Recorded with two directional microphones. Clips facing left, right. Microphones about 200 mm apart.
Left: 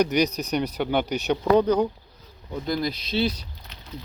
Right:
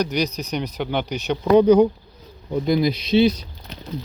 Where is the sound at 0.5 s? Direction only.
5° left (ahead or behind).